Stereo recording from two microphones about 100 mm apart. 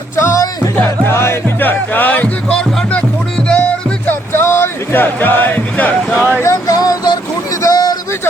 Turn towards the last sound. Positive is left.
turn(degrees=40)  # may be behind; listen again after turning